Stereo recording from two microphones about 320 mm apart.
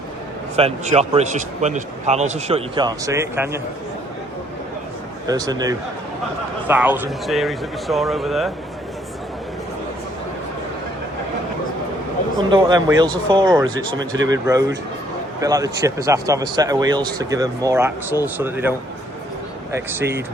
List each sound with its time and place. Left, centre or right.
0.5 s a man's voice: centre
5.2 s speech: centre
12.4 s speech: centre
19.7 s speech: centre